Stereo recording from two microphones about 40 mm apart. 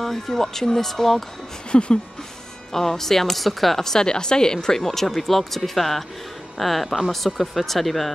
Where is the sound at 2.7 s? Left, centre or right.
Centre.